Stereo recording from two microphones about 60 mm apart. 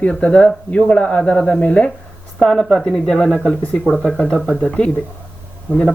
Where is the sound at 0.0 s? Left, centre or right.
Centre.